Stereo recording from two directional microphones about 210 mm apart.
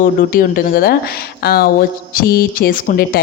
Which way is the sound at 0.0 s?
40° left (ahead or behind).